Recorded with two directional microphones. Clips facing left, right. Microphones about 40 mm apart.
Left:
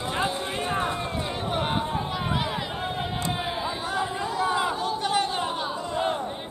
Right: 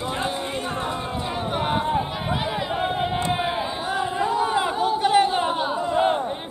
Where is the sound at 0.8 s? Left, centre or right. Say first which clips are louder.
Right 1 dB; centre.